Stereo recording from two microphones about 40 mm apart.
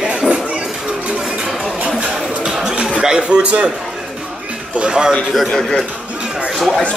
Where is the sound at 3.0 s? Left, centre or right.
Centre.